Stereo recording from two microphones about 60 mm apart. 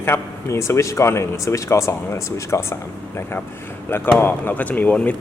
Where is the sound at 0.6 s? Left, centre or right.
Left.